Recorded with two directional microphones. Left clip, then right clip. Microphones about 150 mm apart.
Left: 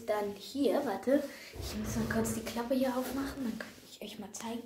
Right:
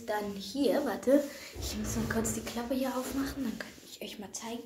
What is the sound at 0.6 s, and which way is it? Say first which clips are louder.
Speech: right 2 dB; 10° right (ahead or behind).